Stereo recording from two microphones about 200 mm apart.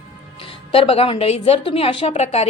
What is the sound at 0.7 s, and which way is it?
A woman's voice, 30° left (ahead or behind).